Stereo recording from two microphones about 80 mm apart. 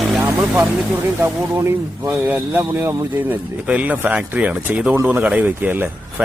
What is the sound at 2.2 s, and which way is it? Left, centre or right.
Speech, right.